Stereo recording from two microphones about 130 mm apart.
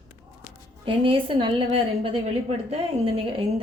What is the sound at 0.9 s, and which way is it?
A woman's voice, 40° right (ahead or behind).